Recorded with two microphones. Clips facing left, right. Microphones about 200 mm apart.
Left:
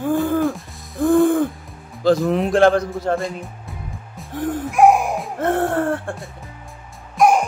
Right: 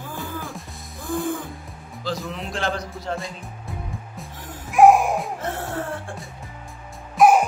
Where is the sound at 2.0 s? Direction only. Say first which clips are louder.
Left 13 dB; 55° left (ahead or behind).